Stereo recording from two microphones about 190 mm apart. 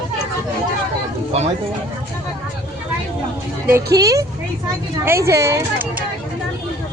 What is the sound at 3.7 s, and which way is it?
Speech, 20° right (ahead or behind).